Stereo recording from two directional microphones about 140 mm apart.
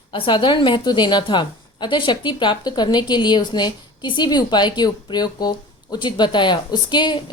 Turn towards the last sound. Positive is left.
turn(degrees=30)  # may be behind; listen again after turning